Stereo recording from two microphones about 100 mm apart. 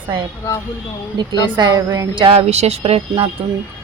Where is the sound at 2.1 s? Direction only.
70° right (ahead or behind).